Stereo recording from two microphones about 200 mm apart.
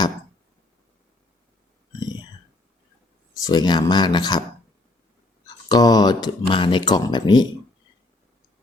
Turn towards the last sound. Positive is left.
turn(degrees=20)  # may be behind; listen again after turning